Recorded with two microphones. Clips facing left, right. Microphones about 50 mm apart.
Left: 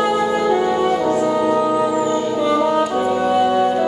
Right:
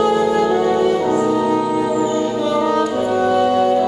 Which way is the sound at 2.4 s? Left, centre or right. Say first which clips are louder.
Left 2 dB; centre.